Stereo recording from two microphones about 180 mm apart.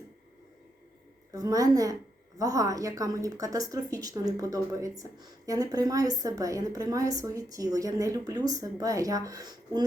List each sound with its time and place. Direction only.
1.3 s a woman's voice: 20° right (ahead or behind)